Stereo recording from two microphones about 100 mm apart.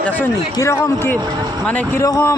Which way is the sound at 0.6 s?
30° left (ahead or behind).